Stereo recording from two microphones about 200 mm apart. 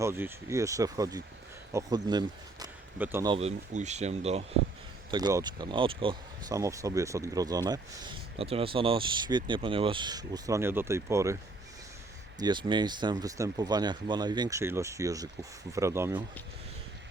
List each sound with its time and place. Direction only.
0.0 s speech: 10° right (ahead or behind)
3.3 s speech: 35° right (ahead or behind)
5.1 s speech: 20° right (ahead or behind)
12.4 s speech: 20° right (ahead or behind)